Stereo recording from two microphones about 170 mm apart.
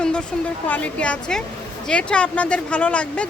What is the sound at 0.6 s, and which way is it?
A woman's voice, 10° left (ahead or behind).